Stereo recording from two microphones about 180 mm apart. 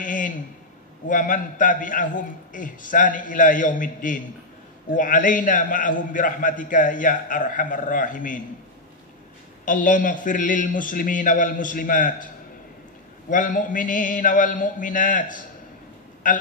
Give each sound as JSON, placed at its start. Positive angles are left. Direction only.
{"t": 0.0, "sound": "a sound", "side_deg": 45}
{"t": 1.0, "sound": "a man's voice", "side_deg": 45}
{"t": 9.7, "sound": "a man's voice", "side_deg": 45}
{"t": 13.3, "sound": "a man's voice", "side_deg": 45}